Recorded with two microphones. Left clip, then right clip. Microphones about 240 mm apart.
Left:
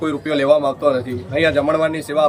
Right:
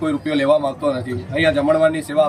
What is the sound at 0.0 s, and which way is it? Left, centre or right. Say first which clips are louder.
Speech: left 1 dB; centre.